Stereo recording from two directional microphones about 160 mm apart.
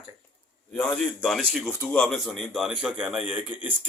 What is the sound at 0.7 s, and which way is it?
A man's voice, 5° left (ahead or behind).